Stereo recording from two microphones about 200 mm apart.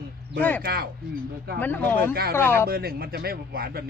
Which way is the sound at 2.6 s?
50° right (ahead or behind).